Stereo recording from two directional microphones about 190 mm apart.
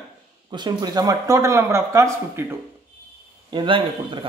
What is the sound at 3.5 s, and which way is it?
Speech, 25° right (ahead or behind).